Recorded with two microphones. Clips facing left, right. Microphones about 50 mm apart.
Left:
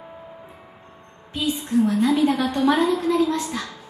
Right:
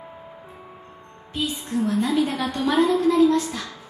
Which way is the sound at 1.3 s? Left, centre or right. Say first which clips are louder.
Left 4 dB; left.